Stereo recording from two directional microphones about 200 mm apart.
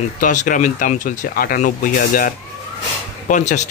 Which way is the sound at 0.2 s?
40° left (ahead or behind).